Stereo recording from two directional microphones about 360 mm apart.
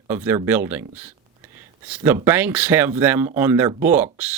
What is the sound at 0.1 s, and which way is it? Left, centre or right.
Speech, centre.